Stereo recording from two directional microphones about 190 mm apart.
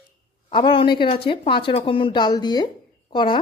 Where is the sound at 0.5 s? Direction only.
25° left (ahead or behind).